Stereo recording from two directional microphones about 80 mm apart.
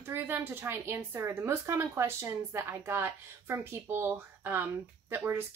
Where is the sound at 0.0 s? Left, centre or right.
Right.